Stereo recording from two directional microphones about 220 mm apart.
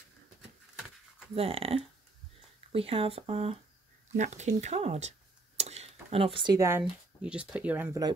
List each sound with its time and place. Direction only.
1.3 s speech: 25° right (ahead or behind)